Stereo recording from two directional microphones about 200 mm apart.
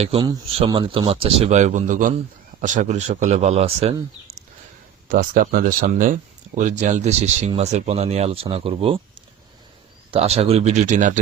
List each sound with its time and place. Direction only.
0.0 s speech: 25° right (ahead or behind)
5.0 s speech: 45° right (ahead or behind); by 9.0 s 25° right (ahead or behind)
10.1 s speech: 30° right (ahead or behind)